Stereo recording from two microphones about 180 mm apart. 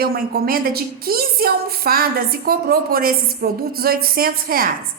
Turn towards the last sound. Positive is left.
turn(degrees=-55)  # may be behind; listen again after turning